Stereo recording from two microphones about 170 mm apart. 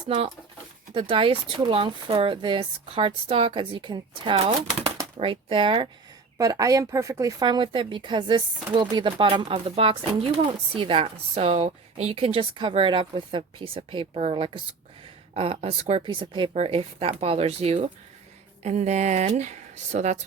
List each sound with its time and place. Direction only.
0.9 s speech: 30° right (ahead or behind)
6.3 s speech: 20° right (ahead or behind); by 20.1 s 45° right (ahead or behind)